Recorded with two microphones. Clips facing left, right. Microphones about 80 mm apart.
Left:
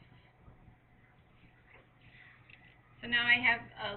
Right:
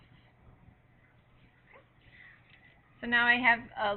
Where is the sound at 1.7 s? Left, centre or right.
Right.